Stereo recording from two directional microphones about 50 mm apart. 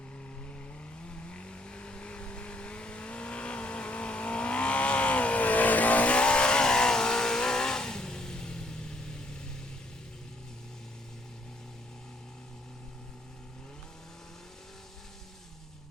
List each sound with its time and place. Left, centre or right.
1.0 s vehicle: left